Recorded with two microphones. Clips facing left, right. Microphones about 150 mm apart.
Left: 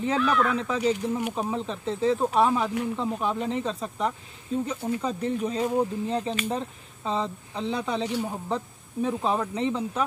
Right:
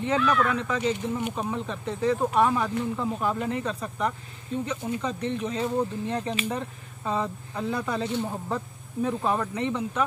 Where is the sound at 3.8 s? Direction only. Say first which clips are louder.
Even; centre (ahead or behind).